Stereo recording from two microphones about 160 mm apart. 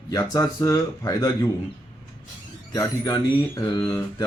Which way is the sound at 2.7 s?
20° left (ahead or behind).